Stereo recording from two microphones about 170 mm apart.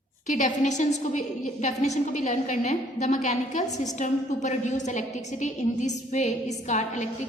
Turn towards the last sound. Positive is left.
turn(degrees=45)  # may be behind; listen again after turning